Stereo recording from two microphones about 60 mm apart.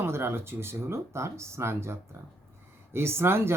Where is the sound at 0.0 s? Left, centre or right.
Right.